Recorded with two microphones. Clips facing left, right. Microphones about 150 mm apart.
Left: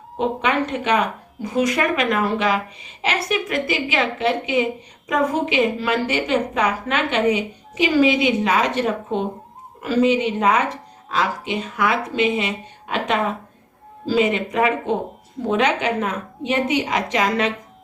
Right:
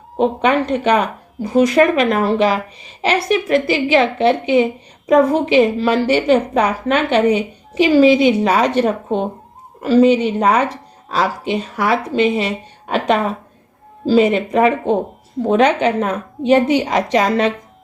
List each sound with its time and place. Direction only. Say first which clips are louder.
0.2 s speech: right 5 dB; 35° right (ahead or behind)